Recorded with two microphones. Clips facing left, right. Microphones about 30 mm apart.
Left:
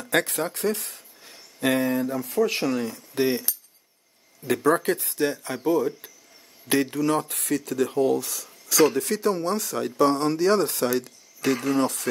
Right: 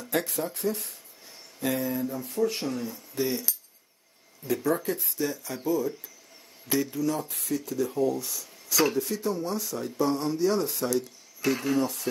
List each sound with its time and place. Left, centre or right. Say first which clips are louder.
0.1 s speech: left 5 dB; left
4.6 s speech: left 8 dB; left
6.7 s speech: left 5 dB; left
10.9 s a sound: left 2 dB; left